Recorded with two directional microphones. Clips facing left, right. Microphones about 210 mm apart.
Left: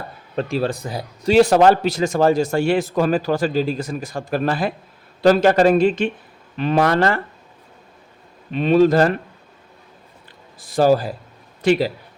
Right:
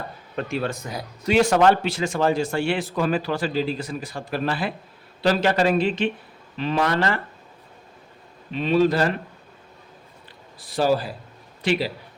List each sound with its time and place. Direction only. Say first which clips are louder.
0.3 s speech: left 5 dB; 30° left (ahead or behind)
8.5 s speech: left 5 dB; 50° left (ahead or behind)
10.6 s a man's voice: left 5 dB; 45° left (ahead or behind)